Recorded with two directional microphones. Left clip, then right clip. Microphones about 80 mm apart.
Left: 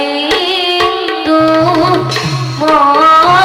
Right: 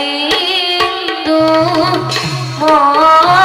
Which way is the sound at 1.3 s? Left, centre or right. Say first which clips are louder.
Left 1 dB; right.